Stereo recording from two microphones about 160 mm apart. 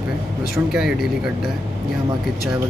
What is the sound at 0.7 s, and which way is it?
Speech, centre (ahead or behind).